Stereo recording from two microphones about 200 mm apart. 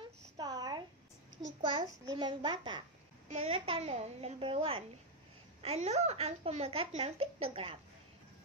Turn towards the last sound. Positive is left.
turn(degrees=-30)  # may be behind; listen again after turning